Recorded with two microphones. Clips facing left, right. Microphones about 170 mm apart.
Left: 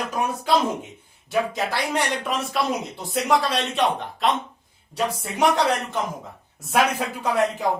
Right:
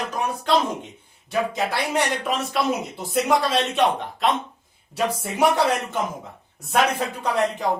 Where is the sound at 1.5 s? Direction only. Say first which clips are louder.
Right 1 dB; centre (ahead or behind).